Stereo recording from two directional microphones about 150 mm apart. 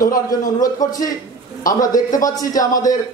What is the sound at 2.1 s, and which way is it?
Speech, 25° left (ahead or behind).